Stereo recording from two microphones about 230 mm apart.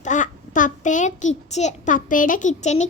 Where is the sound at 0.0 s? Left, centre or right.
Left.